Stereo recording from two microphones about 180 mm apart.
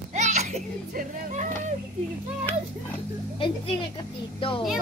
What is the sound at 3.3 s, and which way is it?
A woman's voice, 30° left (ahead or behind).